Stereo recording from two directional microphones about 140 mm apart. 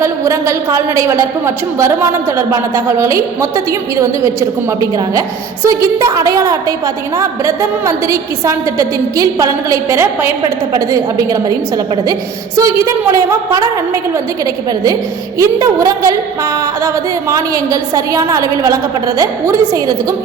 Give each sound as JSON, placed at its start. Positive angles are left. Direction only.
{"t": 0.0, "sound": "a woman's voice", "side_deg": -20}
{"t": 12.5, "sound": "a woman's voice", "side_deg": -20}
{"t": 15.4, "sound": "a woman's voice", "side_deg": -20}